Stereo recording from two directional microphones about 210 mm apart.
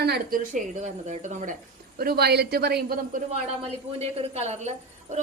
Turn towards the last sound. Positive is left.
turn(degrees=-35)  # may be behind; listen again after turning